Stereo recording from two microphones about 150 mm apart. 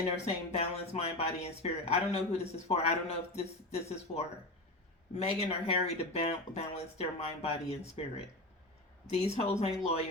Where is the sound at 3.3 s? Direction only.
45° left (ahead or behind).